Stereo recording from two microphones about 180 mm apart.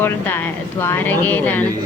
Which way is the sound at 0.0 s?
10° left (ahead or behind).